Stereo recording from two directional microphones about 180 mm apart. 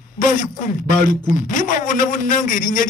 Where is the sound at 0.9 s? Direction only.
45° left (ahead or behind).